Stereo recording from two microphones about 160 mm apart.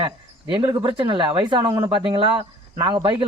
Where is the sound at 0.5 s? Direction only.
30° right (ahead or behind).